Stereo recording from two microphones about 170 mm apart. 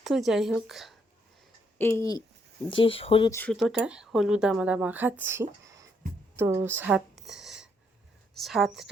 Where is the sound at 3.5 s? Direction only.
Centre (ahead or behind).